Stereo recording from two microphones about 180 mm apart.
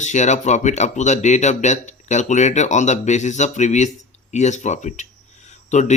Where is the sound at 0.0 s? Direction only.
40° left (ahead or behind).